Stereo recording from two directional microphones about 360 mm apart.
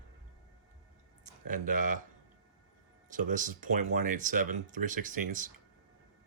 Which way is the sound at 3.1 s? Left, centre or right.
Right.